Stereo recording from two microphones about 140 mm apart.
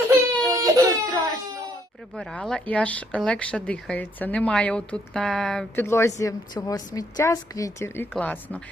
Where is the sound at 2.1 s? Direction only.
5° left (ahead or behind).